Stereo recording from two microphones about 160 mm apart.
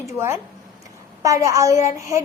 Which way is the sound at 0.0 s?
15° right (ahead or behind).